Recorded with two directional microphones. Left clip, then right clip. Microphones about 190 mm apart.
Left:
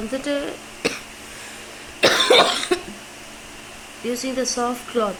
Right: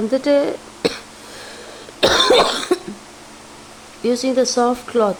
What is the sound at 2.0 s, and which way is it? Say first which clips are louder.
Cough: right 2 dB; 55° right (ahead or behind).